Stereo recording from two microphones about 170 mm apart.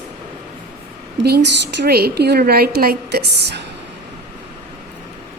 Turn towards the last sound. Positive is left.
turn(degrees=-75)  # may be behind; listen again after turning